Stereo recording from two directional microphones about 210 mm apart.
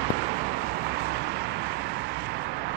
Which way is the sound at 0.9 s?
50° right (ahead or behind).